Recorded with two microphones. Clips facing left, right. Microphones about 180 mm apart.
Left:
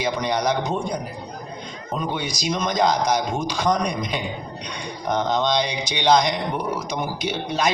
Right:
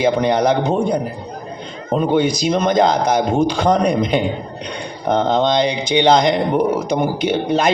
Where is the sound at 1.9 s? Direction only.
55° right (ahead or behind).